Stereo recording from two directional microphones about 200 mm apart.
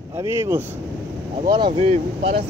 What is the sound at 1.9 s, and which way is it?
Speech, 35° right (ahead or behind).